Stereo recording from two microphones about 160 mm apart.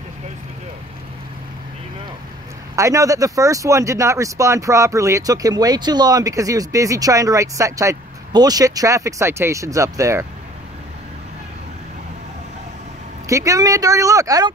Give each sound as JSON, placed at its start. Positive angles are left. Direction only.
{"t": 2.7, "sound": "speech", "side_deg": -20}
{"t": 13.3, "sound": "speech", "side_deg": -20}